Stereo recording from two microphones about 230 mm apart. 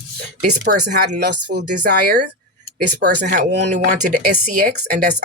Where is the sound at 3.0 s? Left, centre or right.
Right.